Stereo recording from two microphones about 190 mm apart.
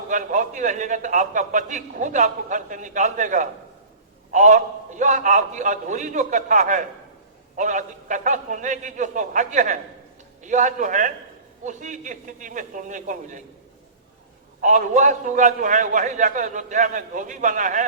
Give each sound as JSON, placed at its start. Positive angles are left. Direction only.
{"t": 0.1, "sound": "a man's voice", "side_deg": -40}
{"t": 14.6, "sound": "a man's voice", "side_deg": -40}